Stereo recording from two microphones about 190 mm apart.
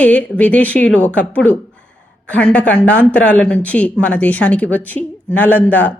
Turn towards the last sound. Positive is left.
turn(degrees=10)  # may be behind; listen again after turning